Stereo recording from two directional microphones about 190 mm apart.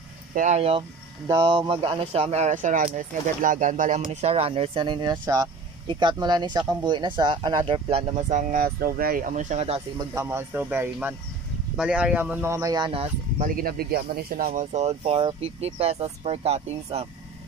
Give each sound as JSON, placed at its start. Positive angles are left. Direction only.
{"t": 0.3, "sound": "speech", "side_deg": -40}
{"t": 8.3, "sound": "speech", "side_deg": -40}
{"t": 10.1, "sound": "speech", "side_deg": -15}
{"t": 13.4, "sound": "speech", "side_deg": -50}